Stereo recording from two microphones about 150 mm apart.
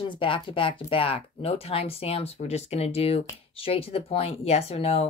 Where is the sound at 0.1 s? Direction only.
35° left (ahead or behind).